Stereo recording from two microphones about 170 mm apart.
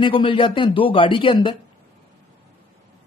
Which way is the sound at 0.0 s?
30° left (ahead or behind).